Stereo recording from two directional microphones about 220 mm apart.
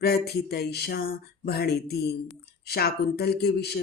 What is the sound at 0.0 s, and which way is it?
Speech, 45° left (ahead or behind).